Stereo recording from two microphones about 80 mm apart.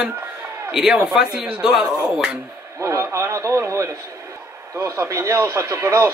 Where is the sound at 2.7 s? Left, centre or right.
Right.